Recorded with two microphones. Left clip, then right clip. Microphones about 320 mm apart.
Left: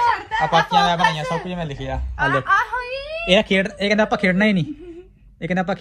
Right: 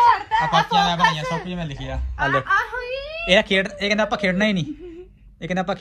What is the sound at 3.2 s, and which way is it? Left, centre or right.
Speech, right.